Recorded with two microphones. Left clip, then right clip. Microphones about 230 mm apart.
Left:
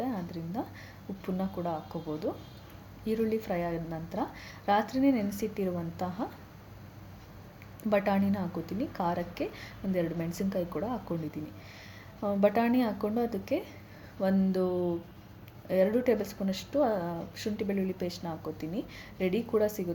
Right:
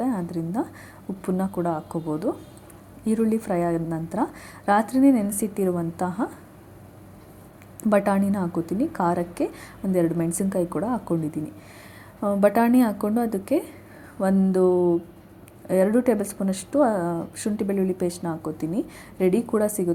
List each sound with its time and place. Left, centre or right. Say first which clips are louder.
0.0 s a sound: right 9 dB; right
1.2 s a woman's voice: right 8 dB; right
7.8 s a woman's voice: right 7 dB; right
12.2 s a woman's voice: right 7 dB; right